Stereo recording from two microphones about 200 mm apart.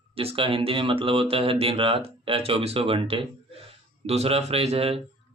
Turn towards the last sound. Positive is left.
turn(degrees=-30)  # may be behind; listen again after turning